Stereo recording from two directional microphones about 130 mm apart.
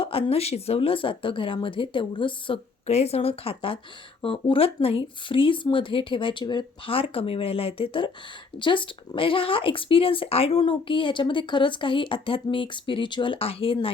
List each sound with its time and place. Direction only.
0.0 s speech: 45° left (ahead or behind)
2.8 s speech: 55° left (ahead or behind)